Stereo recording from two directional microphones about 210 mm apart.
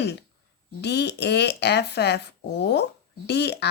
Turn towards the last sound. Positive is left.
turn(degrees=50)  # may be behind; listen again after turning